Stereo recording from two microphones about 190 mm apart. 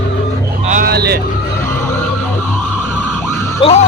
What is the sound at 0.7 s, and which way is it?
Vehicle, 50° right (ahead or behind).